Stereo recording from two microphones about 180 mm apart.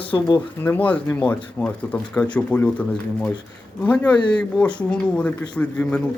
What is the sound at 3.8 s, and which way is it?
Speech, 5° left (ahead or behind).